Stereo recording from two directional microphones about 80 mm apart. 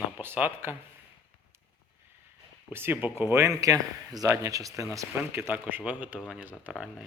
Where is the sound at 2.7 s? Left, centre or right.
Right.